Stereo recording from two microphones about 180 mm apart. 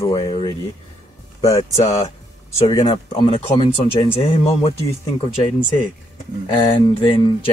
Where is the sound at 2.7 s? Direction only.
25° left (ahead or behind).